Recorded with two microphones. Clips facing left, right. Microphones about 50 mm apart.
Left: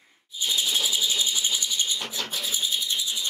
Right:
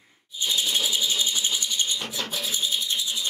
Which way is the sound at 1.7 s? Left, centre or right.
Centre.